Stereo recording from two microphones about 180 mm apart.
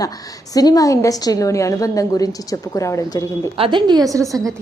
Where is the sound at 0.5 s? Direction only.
20° left (ahead or behind).